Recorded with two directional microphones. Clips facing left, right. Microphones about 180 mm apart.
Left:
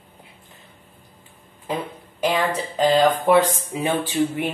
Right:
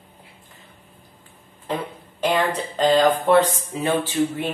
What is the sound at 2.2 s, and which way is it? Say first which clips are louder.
Speech: even; 10° left (ahead or behind).